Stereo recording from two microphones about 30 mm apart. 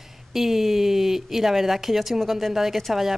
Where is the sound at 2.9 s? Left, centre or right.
Centre.